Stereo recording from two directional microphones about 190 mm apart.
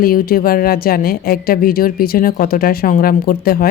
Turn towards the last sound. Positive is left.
turn(degrees=50)  # may be behind; listen again after turning